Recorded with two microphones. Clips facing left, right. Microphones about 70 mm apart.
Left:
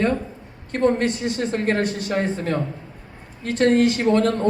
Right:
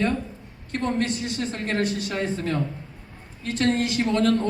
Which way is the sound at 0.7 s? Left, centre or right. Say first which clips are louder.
Left 6 dB; left.